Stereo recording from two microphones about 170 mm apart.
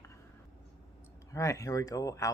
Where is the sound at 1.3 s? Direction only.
20° left (ahead or behind).